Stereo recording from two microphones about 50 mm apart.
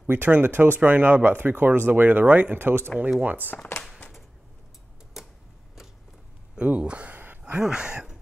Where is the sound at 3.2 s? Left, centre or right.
Right.